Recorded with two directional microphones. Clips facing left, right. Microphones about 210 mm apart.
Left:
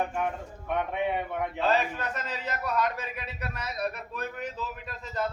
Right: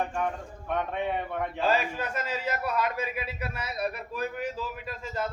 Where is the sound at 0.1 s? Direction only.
10° left (ahead or behind).